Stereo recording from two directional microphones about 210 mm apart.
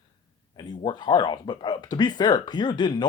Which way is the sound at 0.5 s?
20° left (ahead or behind).